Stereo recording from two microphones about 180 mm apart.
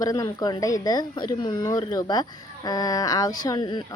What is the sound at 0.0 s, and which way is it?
Speech, 20° left (ahead or behind).